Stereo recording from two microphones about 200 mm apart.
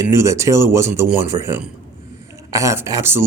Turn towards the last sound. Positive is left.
turn(degrees=-15)  # may be behind; listen again after turning